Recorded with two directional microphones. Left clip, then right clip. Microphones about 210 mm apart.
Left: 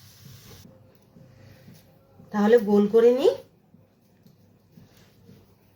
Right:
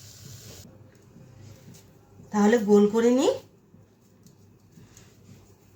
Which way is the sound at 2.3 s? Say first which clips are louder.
Left 1 dB; 15° left (ahead or behind).